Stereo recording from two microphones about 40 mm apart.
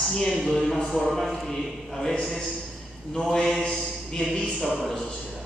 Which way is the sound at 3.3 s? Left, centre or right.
Centre.